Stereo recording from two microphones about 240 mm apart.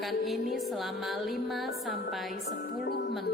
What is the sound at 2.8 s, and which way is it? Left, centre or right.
Music, left.